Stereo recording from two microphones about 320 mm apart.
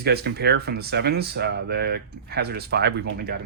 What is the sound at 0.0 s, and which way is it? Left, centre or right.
Speech, right.